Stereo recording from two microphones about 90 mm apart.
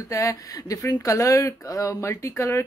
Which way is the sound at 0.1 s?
35° left (ahead or behind).